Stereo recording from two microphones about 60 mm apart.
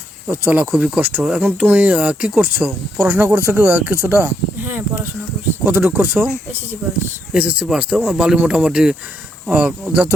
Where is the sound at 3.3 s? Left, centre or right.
Right.